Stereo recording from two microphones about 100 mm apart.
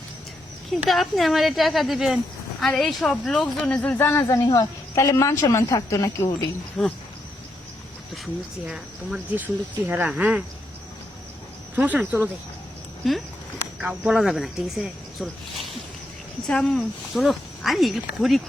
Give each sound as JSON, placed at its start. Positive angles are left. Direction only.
{"t": 0.9, "sound": "speech", "side_deg": 0}
{"t": 4.3, "sound": "a woman's voice", "side_deg": 35}
{"t": 6.8, "sound": "speech", "side_deg": 0}
{"t": 8.1, "sound": "speech", "side_deg": 0}
{"t": 9.3, "sound": "speech", "side_deg": -20}
{"t": 11.8, "sound": "speech", "side_deg": -10}
{"t": 13.0, "sound": "speech", "side_deg": 0}